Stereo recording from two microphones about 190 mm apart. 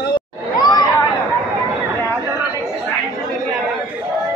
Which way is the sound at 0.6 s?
20° left (ahead or behind).